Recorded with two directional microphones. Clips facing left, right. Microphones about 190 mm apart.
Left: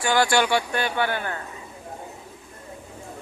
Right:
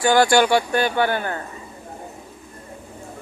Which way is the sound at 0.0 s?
45° right (ahead or behind).